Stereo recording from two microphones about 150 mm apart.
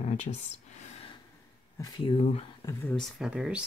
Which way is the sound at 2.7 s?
20° left (ahead or behind).